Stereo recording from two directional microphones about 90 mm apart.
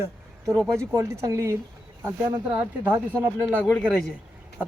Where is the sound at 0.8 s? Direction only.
35° right (ahead or behind).